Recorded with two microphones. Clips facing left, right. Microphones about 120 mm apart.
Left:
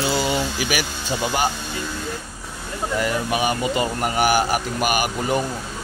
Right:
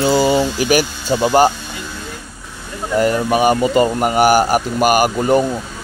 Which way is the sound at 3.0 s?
45° right (ahead or behind).